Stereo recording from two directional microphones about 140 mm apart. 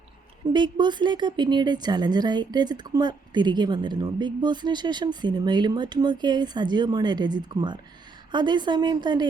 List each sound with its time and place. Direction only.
0.5 s a woman's voice: 35° right (ahead or behind)